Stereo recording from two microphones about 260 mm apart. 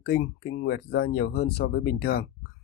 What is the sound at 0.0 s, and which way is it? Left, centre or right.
Speech, left.